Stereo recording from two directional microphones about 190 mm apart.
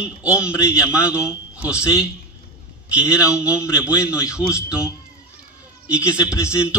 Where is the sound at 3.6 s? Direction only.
15° left (ahead or behind).